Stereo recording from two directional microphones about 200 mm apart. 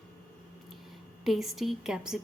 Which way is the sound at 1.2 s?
Centre (ahead or behind).